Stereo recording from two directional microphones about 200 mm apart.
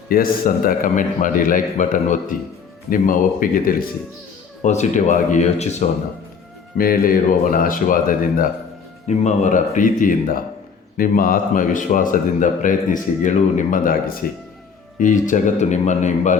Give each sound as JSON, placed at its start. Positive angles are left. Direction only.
{"t": 0.1, "sound": "a man's voice", "side_deg": 45}
{"t": 6.7, "sound": "a man's voice", "side_deg": 45}